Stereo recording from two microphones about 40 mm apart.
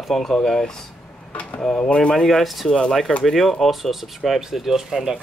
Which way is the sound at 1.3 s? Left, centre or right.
Left.